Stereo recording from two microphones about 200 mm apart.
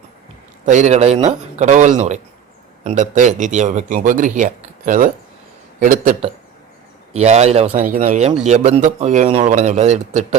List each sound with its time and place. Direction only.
0.6 s a man's voice: 35° right (ahead or behind)